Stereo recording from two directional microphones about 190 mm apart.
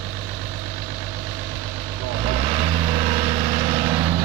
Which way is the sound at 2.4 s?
35° right (ahead or behind).